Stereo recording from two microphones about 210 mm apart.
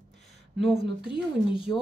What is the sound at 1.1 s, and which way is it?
Speech, 25° left (ahead or behind).